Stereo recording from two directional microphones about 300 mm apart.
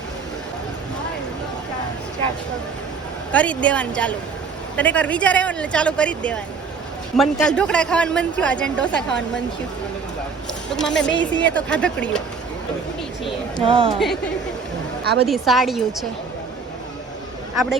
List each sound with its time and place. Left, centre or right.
3.3 s speech: centre
10.7 s speech: centre
13.7 s speech: centre
15.0 s a woman's voice: right
15.3 s speech: centre